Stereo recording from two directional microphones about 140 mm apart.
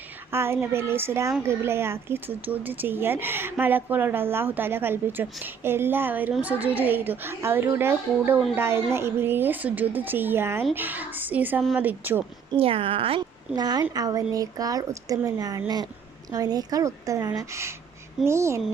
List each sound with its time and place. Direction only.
0.3 s speech: 15° right (ahead or behind)
12.5 s a woman's voice: 40° right (ahead or behind)
13.6 s speech: 30° right (ahead or behind)